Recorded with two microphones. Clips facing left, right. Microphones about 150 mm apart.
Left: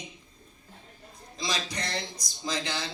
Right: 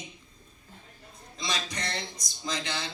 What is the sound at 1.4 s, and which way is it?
Speech, 35° left (ahead or behind).